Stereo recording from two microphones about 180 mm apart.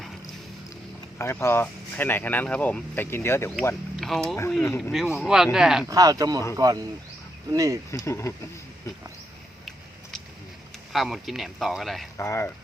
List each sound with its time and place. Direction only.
1.2 s speech: 15° left (ahead or behind); by 5.8 s 5° right (ahead or behind)
5.9 s speech: 20° right (ahead or behind)
7.9 s speech: 15° left (ahead or behind)
10.9 s speech: centre (ahead or behind)
12.1 s speech: 15° left (ahead or behind)